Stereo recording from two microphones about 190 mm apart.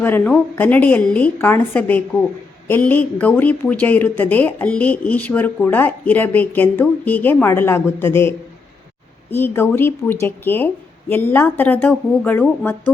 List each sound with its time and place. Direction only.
0.0 s speech: 10° left (ahead or behind)
9.3 s speech: 10° left (ahead or behind)